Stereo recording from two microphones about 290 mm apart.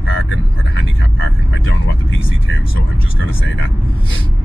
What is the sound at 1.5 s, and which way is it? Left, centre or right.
Speech, left.